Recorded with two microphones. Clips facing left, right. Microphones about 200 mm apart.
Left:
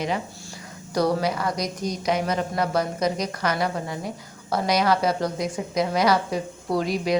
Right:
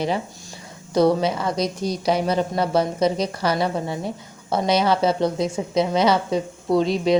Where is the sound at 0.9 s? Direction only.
25° right (ahead or behind).